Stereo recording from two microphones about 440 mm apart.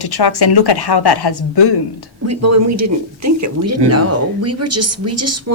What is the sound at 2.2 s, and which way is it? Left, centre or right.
Speech, right.